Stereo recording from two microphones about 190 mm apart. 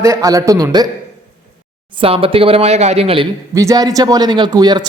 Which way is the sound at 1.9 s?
30° right (ahead or behind).